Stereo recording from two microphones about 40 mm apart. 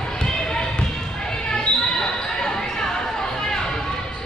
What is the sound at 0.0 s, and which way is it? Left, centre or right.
Basketball bounce, centre.